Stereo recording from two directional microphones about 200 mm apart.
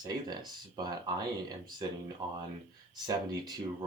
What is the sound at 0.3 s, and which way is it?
Speech, 20° right (ahead or behind).